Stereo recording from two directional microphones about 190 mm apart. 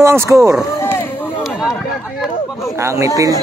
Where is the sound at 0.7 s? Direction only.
10° left (ahead or behind).